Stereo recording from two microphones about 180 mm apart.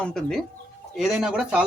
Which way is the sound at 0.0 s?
5° left (ahead or behind).